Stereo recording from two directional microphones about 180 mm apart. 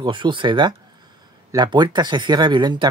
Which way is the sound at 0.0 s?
25° right (ahead or behind).